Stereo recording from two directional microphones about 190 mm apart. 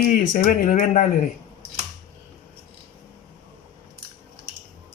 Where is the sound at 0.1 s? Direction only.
45° left (ahead or behind).